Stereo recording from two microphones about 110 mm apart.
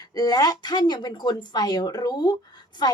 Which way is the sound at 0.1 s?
35° left (ahead or behind).